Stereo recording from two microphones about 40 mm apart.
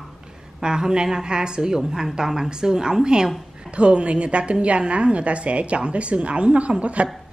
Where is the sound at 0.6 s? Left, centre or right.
Centre.